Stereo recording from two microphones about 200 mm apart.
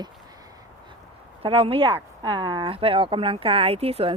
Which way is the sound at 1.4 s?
30° right (ahead or behind).